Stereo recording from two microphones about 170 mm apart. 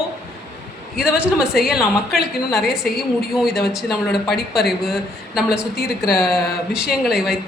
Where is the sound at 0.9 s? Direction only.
5° right (ahead or behind).